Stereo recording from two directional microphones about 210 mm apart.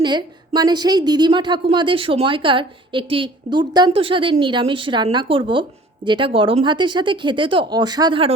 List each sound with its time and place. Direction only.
0.0 s a woman's voice: 20° right (ahead or behind)